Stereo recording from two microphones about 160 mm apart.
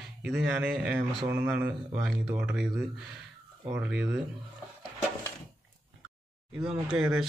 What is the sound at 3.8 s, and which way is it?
Speech, 5° right (ahead or behind).